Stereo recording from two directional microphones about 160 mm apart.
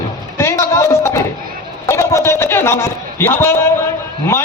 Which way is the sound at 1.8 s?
15° left (ahead or behind).